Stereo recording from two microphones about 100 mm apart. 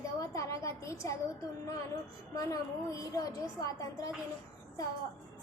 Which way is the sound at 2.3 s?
35° left (ahead or behind).